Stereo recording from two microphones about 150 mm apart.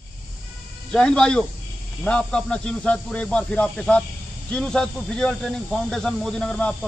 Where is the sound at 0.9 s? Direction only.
5° left (ahead or behind).